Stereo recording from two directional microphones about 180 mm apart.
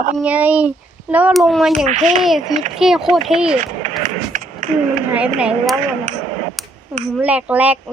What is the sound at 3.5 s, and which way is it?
Speech, 40° right (ahead or behind).